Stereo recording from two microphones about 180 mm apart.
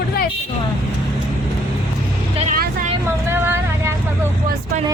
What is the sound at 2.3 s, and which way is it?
Vehicle, 40° right (ahead or behind).